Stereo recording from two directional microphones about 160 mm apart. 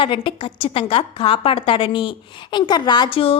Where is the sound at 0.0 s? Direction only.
35° left (ahead or behind).